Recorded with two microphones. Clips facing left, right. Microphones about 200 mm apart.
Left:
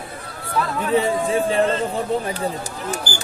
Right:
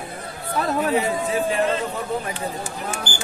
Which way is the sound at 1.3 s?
30° left (ahead or behind).